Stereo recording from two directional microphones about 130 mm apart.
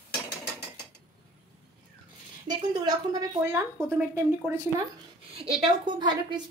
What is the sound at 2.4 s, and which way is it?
A woman's voice, 35° right (ahead or behind).